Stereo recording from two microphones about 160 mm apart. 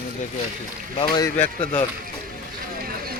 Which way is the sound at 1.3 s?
45° left (ahead or behind).